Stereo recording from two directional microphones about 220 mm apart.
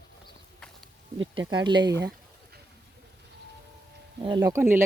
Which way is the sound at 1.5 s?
20° right (ahead or behind).